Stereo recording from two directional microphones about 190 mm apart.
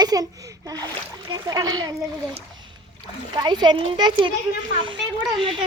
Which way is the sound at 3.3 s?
20° right (ahead or behind).